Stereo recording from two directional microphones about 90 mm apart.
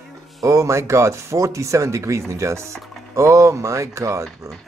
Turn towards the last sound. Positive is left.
turn(degrees=-35)  # may be behind; listen again after turning